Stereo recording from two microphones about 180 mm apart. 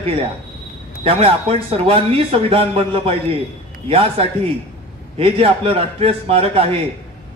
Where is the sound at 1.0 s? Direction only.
30° right (ahead or behind).